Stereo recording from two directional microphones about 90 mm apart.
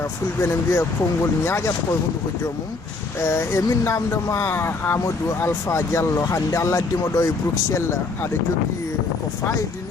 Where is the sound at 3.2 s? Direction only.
30° left (ahead or behind).